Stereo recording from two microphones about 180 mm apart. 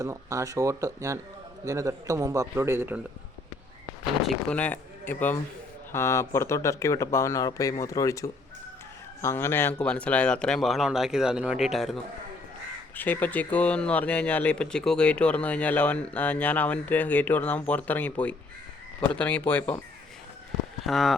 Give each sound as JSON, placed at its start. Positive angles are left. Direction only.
{"t": 0.0, "sound": "a man's voice", "side_deg": -15}
{"t": 4.3, "sound": "speech", "side_deg": 5}
{"t": 13.0, "sound": "speech", "side_deg": 10}
{"t": 20.8, "sound": "speech", "side_deg": 0}